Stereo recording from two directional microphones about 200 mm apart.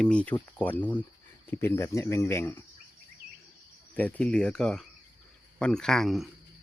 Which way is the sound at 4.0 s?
5° left (ahead or behind).